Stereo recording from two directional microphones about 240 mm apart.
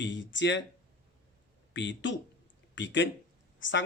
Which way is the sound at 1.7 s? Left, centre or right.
Left.